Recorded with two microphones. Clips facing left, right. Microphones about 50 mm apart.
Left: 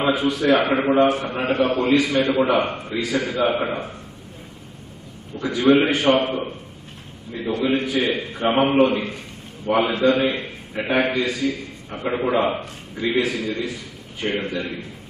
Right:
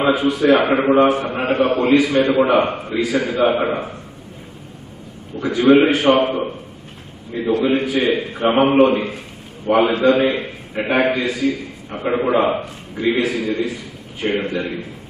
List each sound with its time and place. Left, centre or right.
0.0 s a man's voice: centre
0.6 s a man's voice: centre
1.6 s a man's voice: centre
2.6 s a man's voice: centre
5.3 s a man's voice: centre
7.6 s a man's voice: centre